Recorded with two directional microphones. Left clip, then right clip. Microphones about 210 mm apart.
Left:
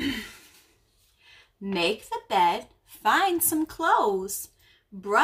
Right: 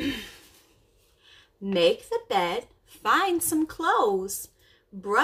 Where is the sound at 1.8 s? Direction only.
15° left (ahead or behind).